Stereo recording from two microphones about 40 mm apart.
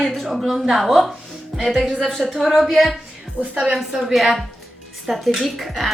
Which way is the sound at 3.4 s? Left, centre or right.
Right.